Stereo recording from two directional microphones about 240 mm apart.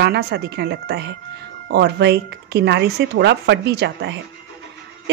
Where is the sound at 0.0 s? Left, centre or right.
Right.